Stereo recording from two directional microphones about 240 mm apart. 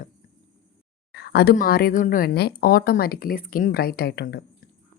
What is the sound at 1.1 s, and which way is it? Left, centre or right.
Speech, left.